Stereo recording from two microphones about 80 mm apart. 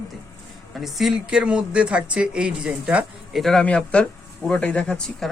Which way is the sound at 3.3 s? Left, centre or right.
Centre.